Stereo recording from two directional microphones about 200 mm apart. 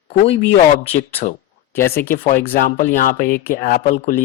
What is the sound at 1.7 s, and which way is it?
Speech, 10° left (ahead or behind).